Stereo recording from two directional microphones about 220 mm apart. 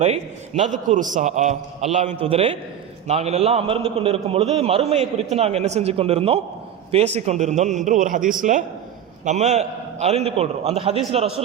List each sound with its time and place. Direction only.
0.0 s a man's voice: 30° right (ahead or behind)